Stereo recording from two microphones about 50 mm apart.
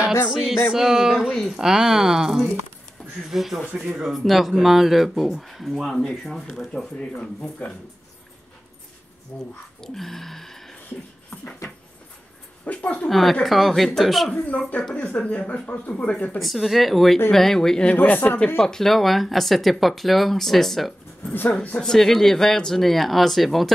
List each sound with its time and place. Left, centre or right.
0.7 s speech: centre
9.3 s speech: left
9.8 s a sound: centre
12.6 s speech: left
13.1 s speech: centre
14.3 s speech: left
16.3 s speech: centre
17.8 s speech: left
18.6 s speech: centre
21.3 s speech: left
21.8 s speech: centre